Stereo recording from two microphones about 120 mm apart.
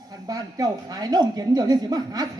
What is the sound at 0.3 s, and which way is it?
Speech, 30° right (ahead or behind).